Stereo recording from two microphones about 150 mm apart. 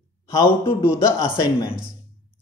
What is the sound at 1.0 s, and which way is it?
Speech, 20° left (ahead or behind).